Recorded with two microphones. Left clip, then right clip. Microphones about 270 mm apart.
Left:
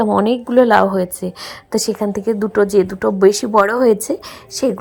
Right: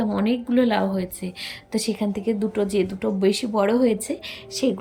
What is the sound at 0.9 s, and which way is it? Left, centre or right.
Speech, centre.